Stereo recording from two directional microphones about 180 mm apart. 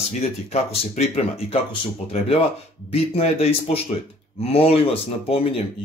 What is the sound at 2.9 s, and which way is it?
Speech, 35° left (ahead or behind).